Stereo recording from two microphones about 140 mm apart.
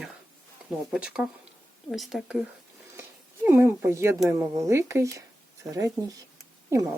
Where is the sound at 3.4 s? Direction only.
15° right (ahead or behind).